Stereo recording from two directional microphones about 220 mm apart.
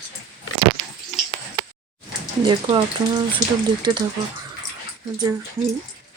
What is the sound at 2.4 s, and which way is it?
Speech, 20° right (ahead or behind).